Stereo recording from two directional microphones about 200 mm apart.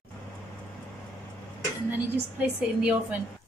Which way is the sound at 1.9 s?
5° right (ahead or behind).